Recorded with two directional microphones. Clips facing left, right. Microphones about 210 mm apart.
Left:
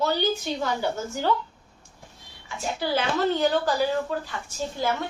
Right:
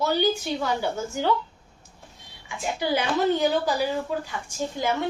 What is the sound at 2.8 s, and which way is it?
Speech, 15° right (ahead or behind).